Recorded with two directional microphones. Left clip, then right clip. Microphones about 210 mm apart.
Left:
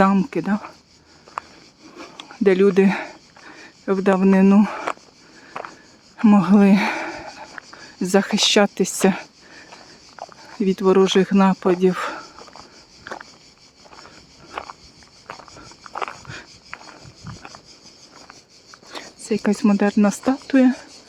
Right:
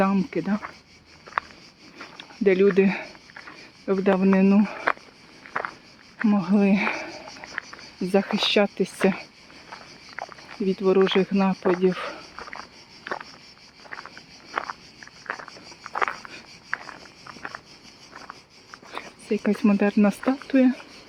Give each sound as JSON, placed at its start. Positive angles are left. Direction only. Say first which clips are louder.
{"t": 0.0, "sound": "speech", "louder": "left 6 dB", "side_deg": 25}
{"t": 2.1, "sound": "speech", "louder": "left 3 dB", "side_deg": 25}
{"t": 6.2, "sound": "speech", "louder": "left 7 dB", "side_deg": 35}
{"t": 10.7, "sound": "speech", "louder": "left 4 dB", "side_deg": 35}
{"t": 12.4, "sound": "a sound", "louder": "right 4 dB", "side_deg": -15}
{"t": 14.5, "sound": "walk", "louder": "right 3 dB", "side_deg": -15}
{"t": 15.3, "sound": "a sound", "louder": "right 3 dB", "side_deg": -20}
{"t": 18.9, "sound": "speech", "louder": "left 3 dB", "side_deg": 25}